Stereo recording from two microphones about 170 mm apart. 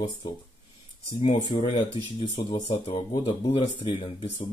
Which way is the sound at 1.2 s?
40° left (ahead or behind).